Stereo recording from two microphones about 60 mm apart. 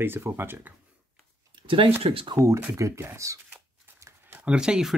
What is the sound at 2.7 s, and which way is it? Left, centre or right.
Speech, right.